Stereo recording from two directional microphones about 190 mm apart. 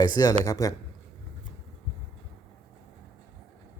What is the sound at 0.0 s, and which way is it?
Speech, 20° left (ahead or behind).